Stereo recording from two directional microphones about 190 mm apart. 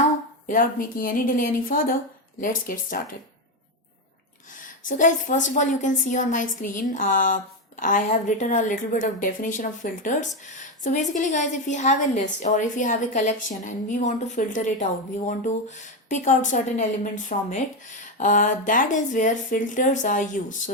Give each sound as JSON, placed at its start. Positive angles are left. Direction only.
{"t": 0.4, "sound": "a woman's voice", "side_deg": 45}
{"t": 4.6, "sound": "a woman's voice", "side_deg": 45}
{"t": 16.0, "sound": "a woman's voice", "side_deg": 40}